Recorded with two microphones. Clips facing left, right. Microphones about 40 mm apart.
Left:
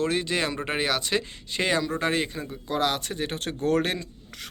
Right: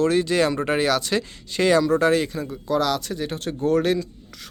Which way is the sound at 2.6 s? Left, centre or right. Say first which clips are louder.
Right 4 dB; left.